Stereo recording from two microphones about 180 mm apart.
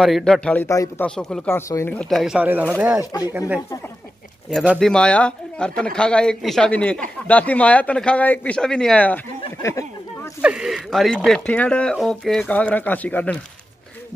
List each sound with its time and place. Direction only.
0.0 s speech: centre (ahead or behind)
0.7 s speech: 15° left (ahead or behind)
1.0 s speech: 5° left (ahead or behind)
3.1 s speech: 20° left (ahead or behind)
3.3 s speech: 10° right (ahead or behind)
4.5 s speech: centre (ahead or behind)
10.4 s speech: 5° right (ahead or behind)